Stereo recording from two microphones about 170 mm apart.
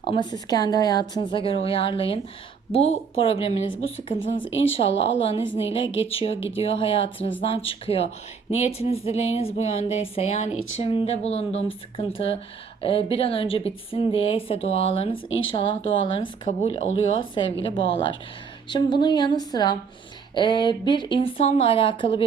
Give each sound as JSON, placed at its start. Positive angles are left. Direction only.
{"t": 0.1, "sound": "a woman's voice", "side_deg": 25}
{"t": 5.5, "sound": "a woman's voice", "side_deg": 35}